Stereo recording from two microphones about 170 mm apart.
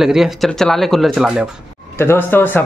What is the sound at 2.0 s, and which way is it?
Speech, 15° left (ahead or behind).